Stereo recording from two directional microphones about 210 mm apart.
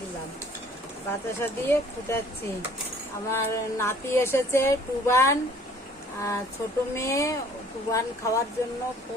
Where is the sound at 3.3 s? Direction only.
15° left (ahead or behind).